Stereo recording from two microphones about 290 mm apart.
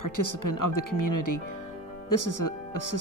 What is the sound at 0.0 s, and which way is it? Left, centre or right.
Speech, left.